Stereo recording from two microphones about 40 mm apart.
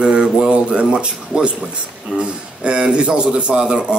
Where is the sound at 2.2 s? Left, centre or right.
Right.